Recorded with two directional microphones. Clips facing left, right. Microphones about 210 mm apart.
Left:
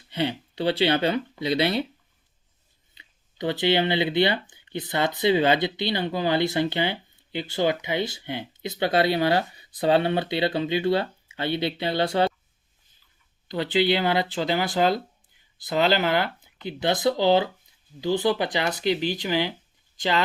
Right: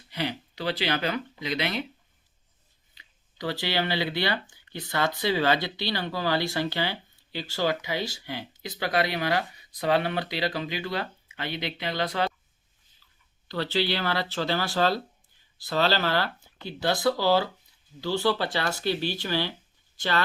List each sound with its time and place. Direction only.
0.1 s speech: 25° left (ahead or behind)
2.9 s speech: 25° left (ahead or behind)
13.5 s speech: 15° left (ahead or behind)